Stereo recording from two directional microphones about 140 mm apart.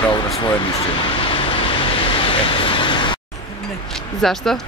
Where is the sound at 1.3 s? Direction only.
40° left (ahead or behind).